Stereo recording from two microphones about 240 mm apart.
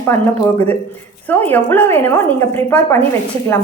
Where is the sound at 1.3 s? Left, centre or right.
Centre.